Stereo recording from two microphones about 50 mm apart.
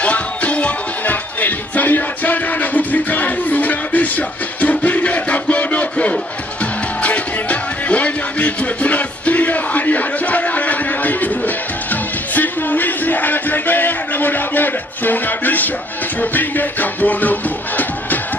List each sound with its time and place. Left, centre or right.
0.0 s music: left